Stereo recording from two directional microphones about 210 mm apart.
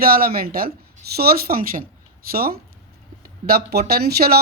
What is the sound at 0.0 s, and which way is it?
A woman's voice, 45° right (ahead or behind).